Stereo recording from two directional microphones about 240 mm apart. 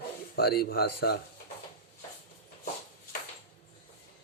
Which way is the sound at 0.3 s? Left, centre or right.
Left.